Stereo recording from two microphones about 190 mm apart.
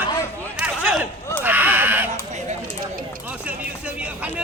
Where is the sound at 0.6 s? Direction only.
5° right (ahead or behind).